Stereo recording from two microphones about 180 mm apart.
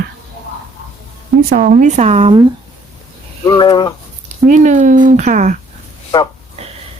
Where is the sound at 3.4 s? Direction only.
25° left (ahead or behind).